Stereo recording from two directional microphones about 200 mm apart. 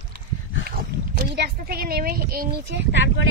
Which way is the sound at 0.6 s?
50° right (ahead or behind).